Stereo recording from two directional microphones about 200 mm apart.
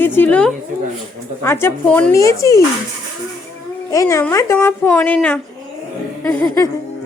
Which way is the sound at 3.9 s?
15° left (ahead or behind).